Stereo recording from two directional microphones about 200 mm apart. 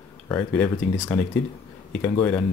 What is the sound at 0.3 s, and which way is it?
Speech, 5° left (ahead or behind).